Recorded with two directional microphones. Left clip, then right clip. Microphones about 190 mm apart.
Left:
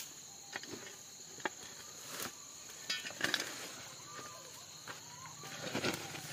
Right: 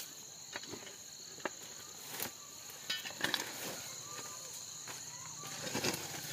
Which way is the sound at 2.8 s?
Centre (ahead or behind).